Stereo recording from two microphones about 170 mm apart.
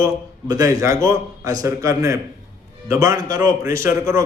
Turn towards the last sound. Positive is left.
turn(degrees=-15)  # may be behind; listen again after turning